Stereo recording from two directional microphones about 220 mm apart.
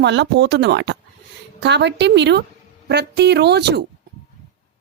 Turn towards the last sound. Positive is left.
turn(degrees=-50)  # may be behind; listen again after turning